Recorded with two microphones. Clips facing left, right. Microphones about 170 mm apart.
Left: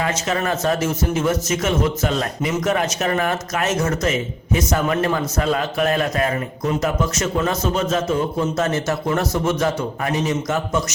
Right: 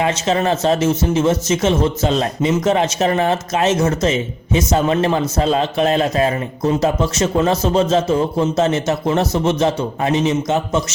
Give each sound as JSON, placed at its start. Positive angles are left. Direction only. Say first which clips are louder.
{"t": 0.0, "sound": "speech", "louder": "right 5 dB", "side_deg": -25}